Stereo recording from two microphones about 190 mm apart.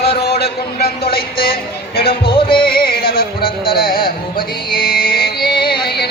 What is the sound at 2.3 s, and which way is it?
Music, 25° left (ahead or behind).